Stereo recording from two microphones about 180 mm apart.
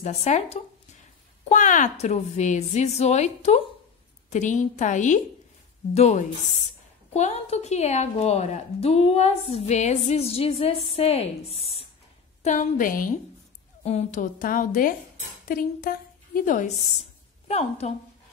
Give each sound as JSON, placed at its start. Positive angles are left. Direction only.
{"t": 0.0, "sound": "a woman's voice", "side_deg": 40}
{"t": 12.4, "sound": "a woman's voice", "side_deg": 45}